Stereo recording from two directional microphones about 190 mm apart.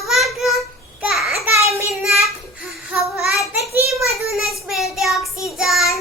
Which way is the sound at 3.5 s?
5° right (ahead or behind).